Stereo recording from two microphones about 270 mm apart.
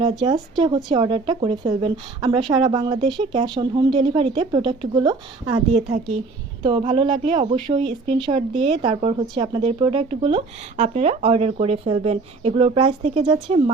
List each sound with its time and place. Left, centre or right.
0.0 s speech: centre